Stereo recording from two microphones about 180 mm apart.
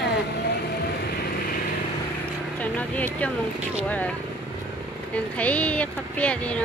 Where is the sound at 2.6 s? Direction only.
10° left (ahead or behind).